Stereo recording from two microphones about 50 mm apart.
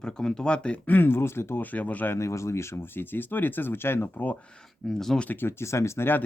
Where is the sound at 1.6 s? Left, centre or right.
Left.